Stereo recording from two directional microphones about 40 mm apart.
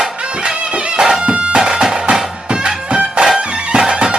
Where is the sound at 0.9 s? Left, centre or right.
Centre.